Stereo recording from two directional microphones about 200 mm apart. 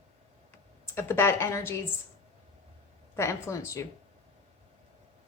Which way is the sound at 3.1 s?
15° left (ahead or behind).